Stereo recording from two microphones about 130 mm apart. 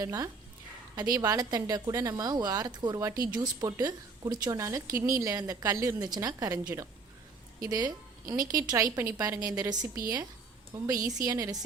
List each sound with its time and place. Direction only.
0.0 s a woman's voice: 30° right (ahead or behind)